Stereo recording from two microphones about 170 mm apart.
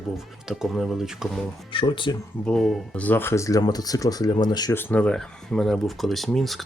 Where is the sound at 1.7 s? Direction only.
30° left (ahead or behind).